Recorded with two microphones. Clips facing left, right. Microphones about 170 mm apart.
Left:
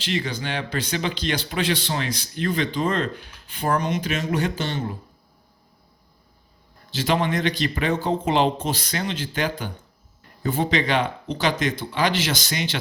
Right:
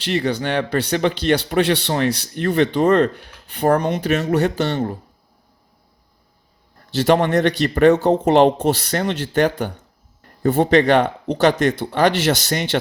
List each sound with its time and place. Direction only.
0.3 s speech: 60° right (ahead or behind)
7.1 s speech: 60° right (ahead or behind)